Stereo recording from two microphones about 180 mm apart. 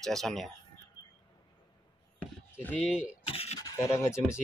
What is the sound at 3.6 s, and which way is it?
Speech, 20° left (ahead or behind).